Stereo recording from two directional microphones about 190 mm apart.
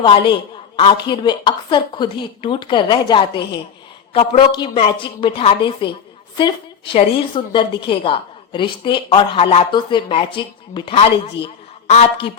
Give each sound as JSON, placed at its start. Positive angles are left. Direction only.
{"t": 0.0, "sound": "a woman's voice", "side_deg": 25}